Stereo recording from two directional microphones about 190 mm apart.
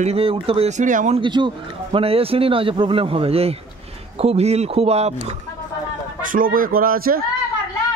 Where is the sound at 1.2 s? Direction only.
25° right (ahead or behind).